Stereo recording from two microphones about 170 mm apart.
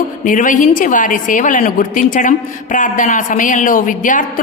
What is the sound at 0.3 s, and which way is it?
A woman's voice, 50° left (ahead or behind).